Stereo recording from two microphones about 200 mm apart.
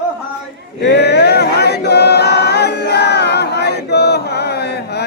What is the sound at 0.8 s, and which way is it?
Choir, 55° left (ahead or behind).